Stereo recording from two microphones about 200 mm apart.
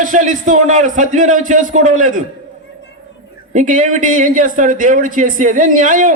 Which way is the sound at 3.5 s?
40° right (ahead or behind).